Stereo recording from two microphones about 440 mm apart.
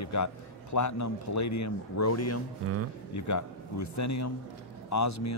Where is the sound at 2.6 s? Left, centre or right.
Right.